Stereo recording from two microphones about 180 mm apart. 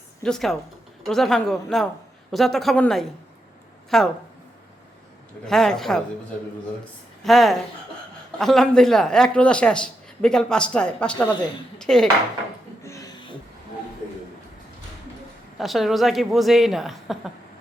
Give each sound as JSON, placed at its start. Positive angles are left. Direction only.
{"t": 0.2, "sound": "a man's voice", "side_deg": 5}
{"t": 5.5, "sound": "a man's voice", "side_deg": 0}
{"t": 7.3, "sound": "a man's voice", "side_deg": 0}
{"t": 11.2, "sound": "speech", "side_deg": 20}
{"t": 11.8, "sound": "a man's voice", "side_deg": 5}
{"t": 15.5, "sound": "a man's voice", "side_deg": 0}